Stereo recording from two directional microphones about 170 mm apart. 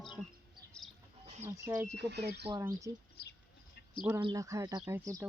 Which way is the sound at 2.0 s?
80° right.